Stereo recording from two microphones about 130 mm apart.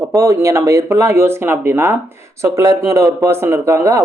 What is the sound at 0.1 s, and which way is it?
Speech, 20° right (ahead or behind).